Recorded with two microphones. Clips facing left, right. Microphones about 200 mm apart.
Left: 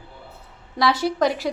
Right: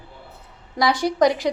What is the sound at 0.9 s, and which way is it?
Speech, 15° right (ahead or behind).